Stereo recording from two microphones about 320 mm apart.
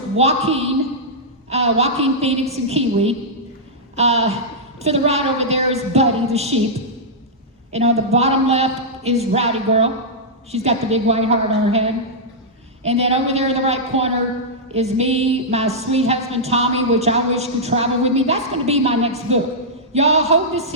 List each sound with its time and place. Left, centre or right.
0.2 s a woman's voice: centre
7.7 s a woman's voice: centre